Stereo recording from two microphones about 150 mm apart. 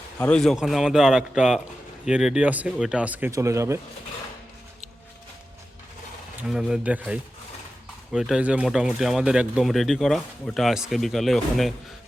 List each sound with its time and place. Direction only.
0.2 s speech: 5° left (ahead or behind); by 3.8 s 20° right (ahead or behind)
6.5 s speech: 5° right (ahead or behind)